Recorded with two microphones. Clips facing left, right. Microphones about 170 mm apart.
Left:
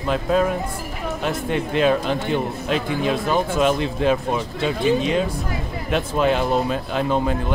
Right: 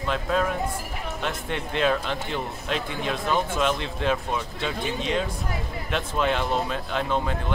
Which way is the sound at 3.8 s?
5° left (ahead or behind).